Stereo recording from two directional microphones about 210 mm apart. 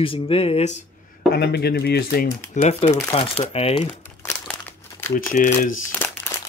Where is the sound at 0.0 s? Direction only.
25° left (ahead or behind).